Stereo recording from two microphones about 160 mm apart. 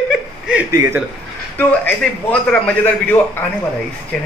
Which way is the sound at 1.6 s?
10° left (ahead or behind).